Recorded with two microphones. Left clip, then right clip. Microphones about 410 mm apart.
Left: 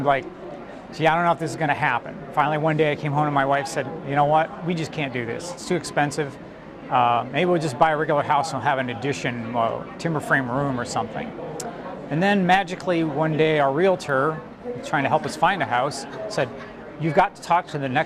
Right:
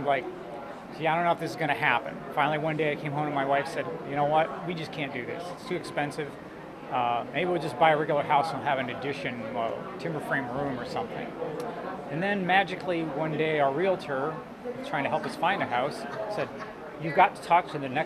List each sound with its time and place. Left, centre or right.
0.0 s a man's voice: left
12.2 s a man's voice: left